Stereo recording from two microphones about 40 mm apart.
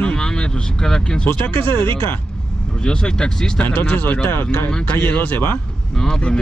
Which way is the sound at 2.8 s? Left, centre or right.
Centre.